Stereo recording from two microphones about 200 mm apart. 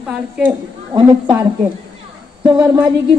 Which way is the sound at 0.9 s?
20° right (ahead or behind).